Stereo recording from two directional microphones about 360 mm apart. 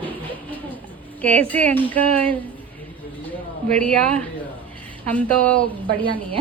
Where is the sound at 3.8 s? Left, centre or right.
Centre.